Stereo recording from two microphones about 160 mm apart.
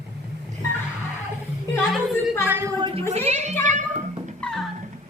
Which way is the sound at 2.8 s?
35° right (ahead or behind).